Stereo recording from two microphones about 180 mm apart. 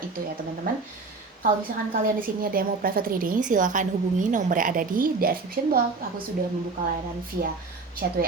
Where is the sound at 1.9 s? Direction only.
50° right (ahead or behind).